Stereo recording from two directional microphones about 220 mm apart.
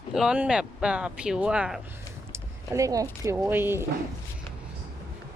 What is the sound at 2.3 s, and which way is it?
Speech, 15° right (ahead or behind).